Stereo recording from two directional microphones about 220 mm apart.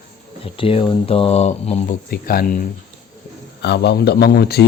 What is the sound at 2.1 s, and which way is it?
Speech, 40° left (ahead or behind).